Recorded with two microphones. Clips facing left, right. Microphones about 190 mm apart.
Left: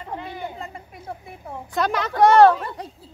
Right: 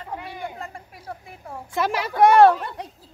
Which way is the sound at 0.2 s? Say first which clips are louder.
Left 1 dB; 20° left (ahead or behind).